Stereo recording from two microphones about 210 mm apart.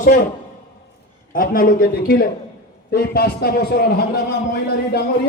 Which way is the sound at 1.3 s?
40° left (ahead or behind).